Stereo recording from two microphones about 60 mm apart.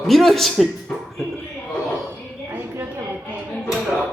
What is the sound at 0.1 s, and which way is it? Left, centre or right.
Speech, centre.